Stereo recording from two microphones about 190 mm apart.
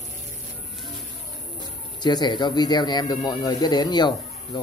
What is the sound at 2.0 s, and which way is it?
Speech, 25° left (ahead or behind).